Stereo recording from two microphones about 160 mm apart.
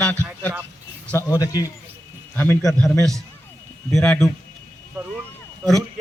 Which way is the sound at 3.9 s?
5° left (ahead or behind).